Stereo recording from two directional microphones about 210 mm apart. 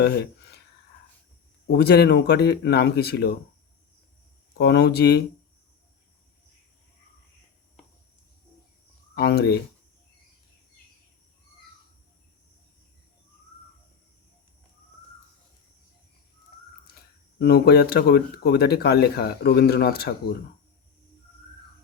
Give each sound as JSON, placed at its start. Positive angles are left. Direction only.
{"t": 0.0, "sound": "a sound", "side_deg": 50}
{"t": 1.6, "sound": "speech", "side_deg": 50}
{"t": 4.5, "sound": "speech", "side_deg": 50}
{"t": 9.1, "sound": "speech", "side_deg": 50}
{"t": 17.4, "sound": "speech", "side_deg": 50}